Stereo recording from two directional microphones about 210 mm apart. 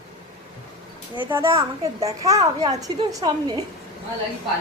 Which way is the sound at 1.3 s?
15° right (ahead or behind).